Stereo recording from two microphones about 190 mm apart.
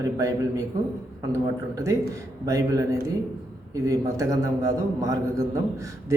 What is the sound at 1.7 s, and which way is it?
A man's voice, 15° right (ahead or behind).